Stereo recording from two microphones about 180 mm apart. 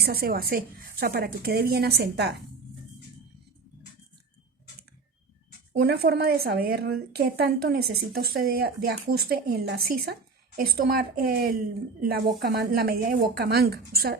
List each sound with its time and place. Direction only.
0.0 s speech: 60° right (ahead or behind)
5.8 s speech: 60° right (ahead or behind)